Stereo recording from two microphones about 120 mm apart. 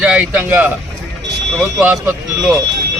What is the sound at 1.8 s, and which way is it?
Speech, 20° right (ahead or behind).